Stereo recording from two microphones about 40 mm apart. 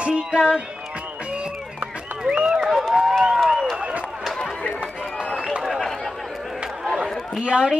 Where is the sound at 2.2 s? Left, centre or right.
Right.